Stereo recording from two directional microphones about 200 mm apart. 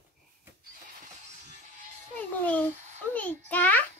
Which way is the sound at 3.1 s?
5° left (ahead or behind).